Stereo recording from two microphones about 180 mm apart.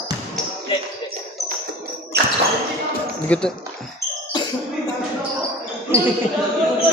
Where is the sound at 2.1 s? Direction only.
60° right (ahead or behind).